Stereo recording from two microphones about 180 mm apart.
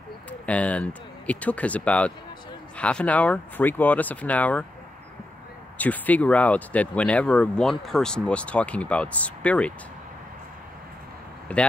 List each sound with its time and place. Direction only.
0.3 s speech: 5° left (ahead or behind)
5.8 s speech: 10° left (ahead or behind)
11.5 s speech: 10° left (ahead or behind)